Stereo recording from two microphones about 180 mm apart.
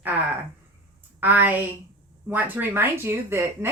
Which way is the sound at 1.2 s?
10° right (ahead or behind).